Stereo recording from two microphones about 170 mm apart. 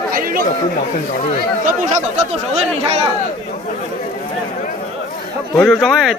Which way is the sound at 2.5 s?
40° right (ahead or behind).